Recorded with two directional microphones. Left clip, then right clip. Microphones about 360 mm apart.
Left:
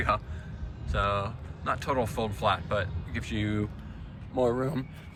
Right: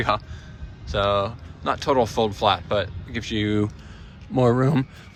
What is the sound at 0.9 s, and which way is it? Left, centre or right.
Speech, centre.